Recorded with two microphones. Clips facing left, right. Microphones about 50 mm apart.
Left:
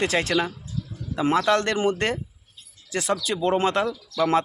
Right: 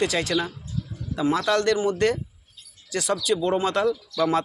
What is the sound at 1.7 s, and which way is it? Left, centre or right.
Speech, left.